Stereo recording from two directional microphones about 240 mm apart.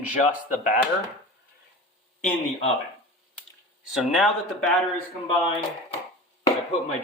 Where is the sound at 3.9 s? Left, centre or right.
Centre.